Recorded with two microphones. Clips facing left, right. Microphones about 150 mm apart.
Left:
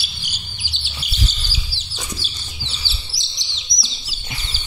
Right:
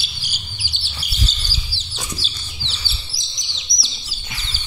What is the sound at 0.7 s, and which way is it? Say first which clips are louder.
Chirp: left 3 dB; 20° left (ahead or behind).